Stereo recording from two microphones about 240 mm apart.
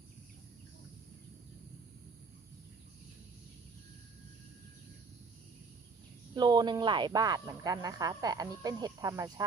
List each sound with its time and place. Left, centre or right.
6.3 s speech: centre